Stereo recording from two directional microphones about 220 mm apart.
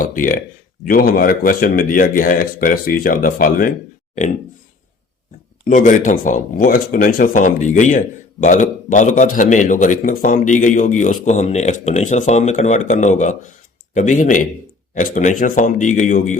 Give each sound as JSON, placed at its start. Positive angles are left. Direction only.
{"t": 0.0, "sound": "speech", "side_deg": 35}
{"t": 5.6, "sound": "speech", "side_deg": 35}